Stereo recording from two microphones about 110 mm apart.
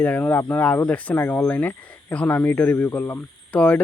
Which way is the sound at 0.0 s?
15° left (ahead or behind).